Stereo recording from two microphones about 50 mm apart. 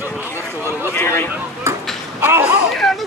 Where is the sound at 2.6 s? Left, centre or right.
Centre.